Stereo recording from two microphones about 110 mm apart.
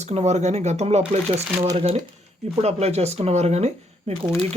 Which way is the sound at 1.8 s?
60° right (ahead or behind).